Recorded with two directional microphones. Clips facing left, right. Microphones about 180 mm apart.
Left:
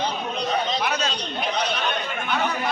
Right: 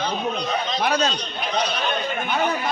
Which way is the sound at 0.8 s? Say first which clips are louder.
Right 4 dB; 35° right (ahead or behind).